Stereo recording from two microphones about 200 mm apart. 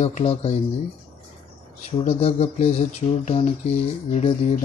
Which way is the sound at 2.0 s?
30° left (ahead or behind).